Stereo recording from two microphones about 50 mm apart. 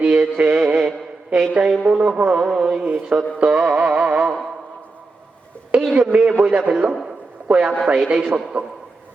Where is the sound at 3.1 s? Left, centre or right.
Right.